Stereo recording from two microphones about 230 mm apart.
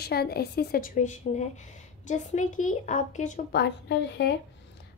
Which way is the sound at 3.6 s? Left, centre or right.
Left.